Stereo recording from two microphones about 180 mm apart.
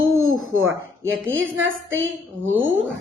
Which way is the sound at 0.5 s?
90° right.